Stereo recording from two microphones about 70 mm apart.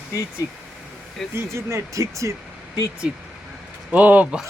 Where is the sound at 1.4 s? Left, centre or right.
Right.